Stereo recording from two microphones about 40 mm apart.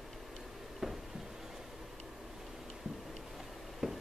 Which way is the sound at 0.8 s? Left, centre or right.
Centre.